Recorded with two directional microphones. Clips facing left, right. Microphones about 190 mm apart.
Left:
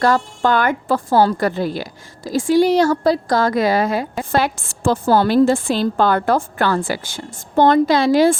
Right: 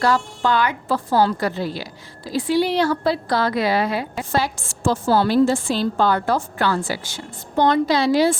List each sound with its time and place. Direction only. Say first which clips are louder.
0.0 s a woman's voice: left 3 dB; 50° left (ahead or behind)